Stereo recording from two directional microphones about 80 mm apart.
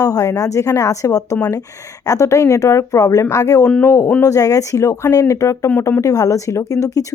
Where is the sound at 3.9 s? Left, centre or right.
Left.